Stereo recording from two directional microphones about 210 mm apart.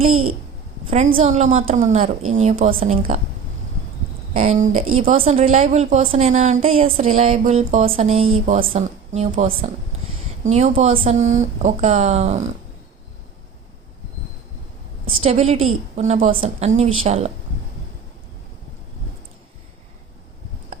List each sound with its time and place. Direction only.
0.0 s a child's voice: 90° right
0.9 s a woman's voice: 35° right (ahead or behind)
4.4 s speech: 35° right (ahead or behind)
4.9 s a woman's voice: 85° right
5.1 s speech: 30° right (ahead or behind)
15.2 s a woman's voice: 30° right (ahead or behind)